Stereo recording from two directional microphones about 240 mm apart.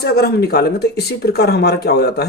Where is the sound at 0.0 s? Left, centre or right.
Left.